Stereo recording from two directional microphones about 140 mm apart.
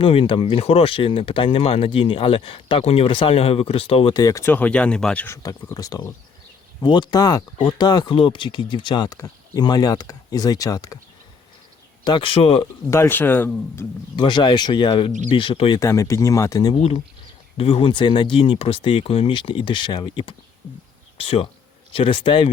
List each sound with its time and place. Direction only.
0.0 s speech: 40° left (ahead or behind)
4.1 s speech: 25° left (ahead or behind)
4.5 s speech: 10° left (ahead or behind)
5.4 s speech: 25° left (ahead or behind)
12.0 s speech: 35° left (ahead or behind)
12.9 s speech: 15° left (ahead or behind)
14.2 s speech: 35° left (ahead or behind)
15.8 s speech: 20° left (ahead or behind)
16.7 s speech: 50° left (ahead or behind)